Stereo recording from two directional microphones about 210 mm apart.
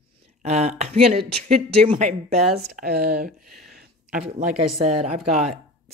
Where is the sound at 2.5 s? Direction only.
45° right (ahead or behind).